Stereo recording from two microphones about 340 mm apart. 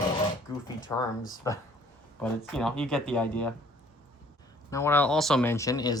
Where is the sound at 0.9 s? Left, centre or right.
Centre.